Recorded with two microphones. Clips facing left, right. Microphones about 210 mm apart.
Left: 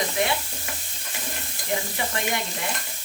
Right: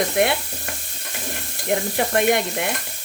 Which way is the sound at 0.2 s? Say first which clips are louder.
Right 6 dB; 60° right (ahead or behind).